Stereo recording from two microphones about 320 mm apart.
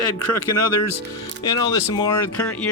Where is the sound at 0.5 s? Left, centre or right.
Left.